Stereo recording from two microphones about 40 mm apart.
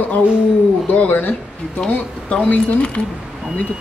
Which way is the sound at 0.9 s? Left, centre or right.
Left.